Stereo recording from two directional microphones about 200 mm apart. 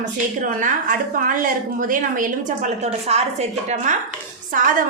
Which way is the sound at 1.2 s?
45° right (ahead or behind).